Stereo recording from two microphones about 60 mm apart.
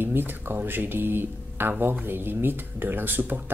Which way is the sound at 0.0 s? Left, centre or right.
Right.